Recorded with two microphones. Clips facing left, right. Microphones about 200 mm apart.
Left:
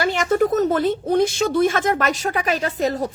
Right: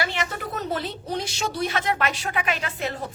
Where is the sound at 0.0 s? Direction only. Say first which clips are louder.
Left 10 dB; 45° left (ahead or behind).